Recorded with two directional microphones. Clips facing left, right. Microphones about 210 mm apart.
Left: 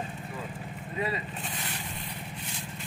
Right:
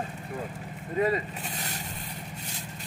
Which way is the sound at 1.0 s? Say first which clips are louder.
Right 6 dB; 40° right (ahead or behind).